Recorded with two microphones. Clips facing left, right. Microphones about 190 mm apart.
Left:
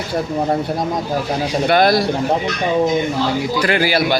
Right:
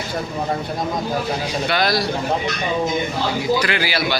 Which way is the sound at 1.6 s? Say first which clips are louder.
Left 7 dB; 50° left (ahead or behind).